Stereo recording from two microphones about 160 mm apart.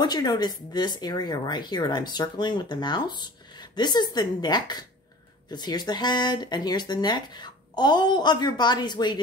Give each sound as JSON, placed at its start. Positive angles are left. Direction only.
{"t": 0.0, "sound": "speech", "side_deg": 25}